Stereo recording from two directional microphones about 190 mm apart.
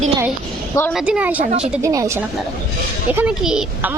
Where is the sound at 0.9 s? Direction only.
5° right (ahead or behind).